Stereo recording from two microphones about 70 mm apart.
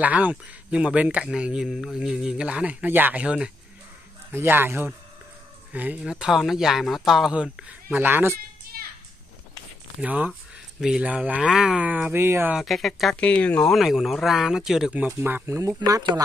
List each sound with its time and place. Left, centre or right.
0.0 s speech: right
4.3 s speech: right
5.7 s speech: right
6.0 s speech: centre
7.6 s speech: right
10.0 s speech: right
11.8 s speech: right
12.2 s speech: right
12.6 s speech: centre
13.1 s speech: centre
13.7 s speech: centre
15.0 s speech: right
15.4 s speech: right